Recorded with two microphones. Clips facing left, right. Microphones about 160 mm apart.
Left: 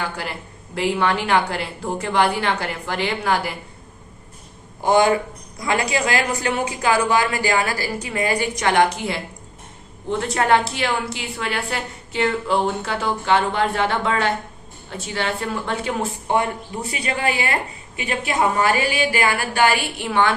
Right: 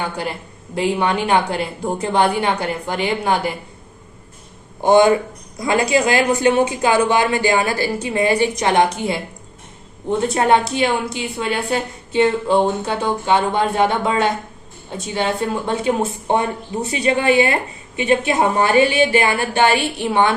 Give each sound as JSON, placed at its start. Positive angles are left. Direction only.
{"t": 0.0, "sound": "speech", "side_deg": -20}
{"t": 4.8, "sound": "speech", "side_deg": -25}